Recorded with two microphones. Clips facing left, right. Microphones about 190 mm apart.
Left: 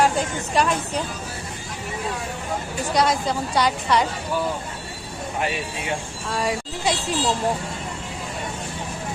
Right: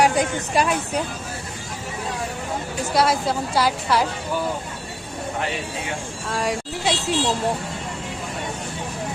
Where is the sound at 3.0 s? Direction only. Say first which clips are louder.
Right 1 dB; 5° right (ahead or behind).